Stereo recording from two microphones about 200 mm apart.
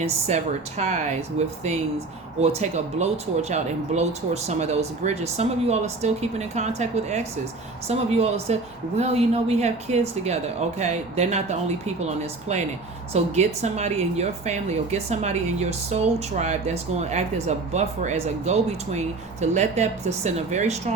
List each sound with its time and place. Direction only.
0.0 s speech: 35° right (ahead or behind)
2.4 s speech: 35° right (ahead or behind)